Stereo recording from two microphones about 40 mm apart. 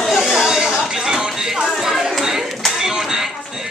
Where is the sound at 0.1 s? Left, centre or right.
Centre.